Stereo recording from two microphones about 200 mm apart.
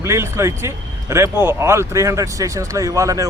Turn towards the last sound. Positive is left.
turn(degrees=-15)  # may be behind; listen again after turning